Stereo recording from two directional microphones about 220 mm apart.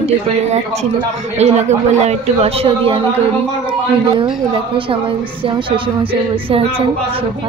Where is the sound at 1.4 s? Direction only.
30° right (ahead or behind).